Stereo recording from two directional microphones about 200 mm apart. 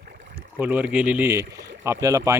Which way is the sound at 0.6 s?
10° right (ahead or behind).